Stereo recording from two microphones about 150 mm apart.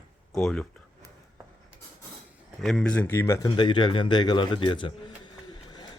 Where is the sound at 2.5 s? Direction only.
Centre (ahead or behind); by 3.5 s 20° left (ahead or behind).